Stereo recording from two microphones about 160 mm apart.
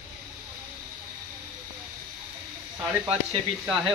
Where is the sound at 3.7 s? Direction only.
5° right (ahead or behind).